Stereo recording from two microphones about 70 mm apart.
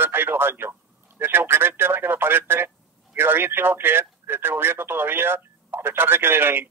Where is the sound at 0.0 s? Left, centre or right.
Right.